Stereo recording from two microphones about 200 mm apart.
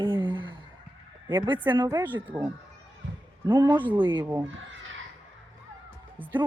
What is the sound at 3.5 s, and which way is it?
Speech, 20° right (ahead or behind).